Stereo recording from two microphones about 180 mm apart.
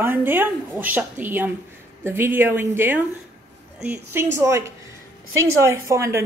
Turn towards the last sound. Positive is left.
turn(degrees=-15)  # may be behind; listen again after turning